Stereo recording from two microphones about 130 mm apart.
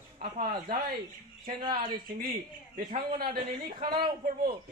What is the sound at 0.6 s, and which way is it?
A woman's voice, 35° right (ahead or behind).